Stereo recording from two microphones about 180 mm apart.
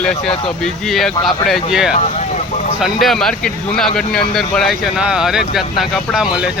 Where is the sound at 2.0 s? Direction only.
40° left (ahead or behind).